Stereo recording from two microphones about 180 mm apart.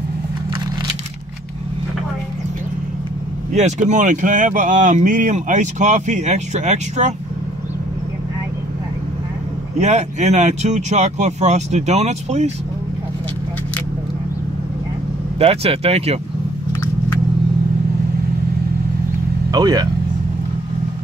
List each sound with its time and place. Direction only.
3.5 s speech: 40° right (ahead or behind)
9.8 s speech: 40° right (ahead or behind)
15.3 s speech: 35° right (ahead or behind)
19.5 s speech: 20° right (ahead or behind)